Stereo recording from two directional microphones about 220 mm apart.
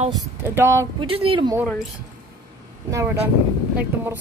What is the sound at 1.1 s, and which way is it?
Speech, 25° right (ahead or behind).